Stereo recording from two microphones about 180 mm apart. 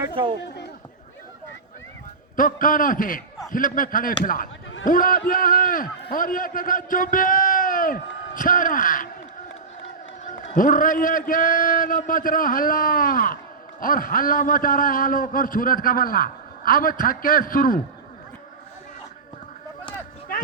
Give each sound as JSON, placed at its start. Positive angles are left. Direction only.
{"t": 0.0, "sound": "a sound", "side_deg": -25}
{"t": 2.3, "sound": "a man's voice", "side_deg": 50}
{"t": 10.5, "sound": "a man's voice", "side_deg": 45}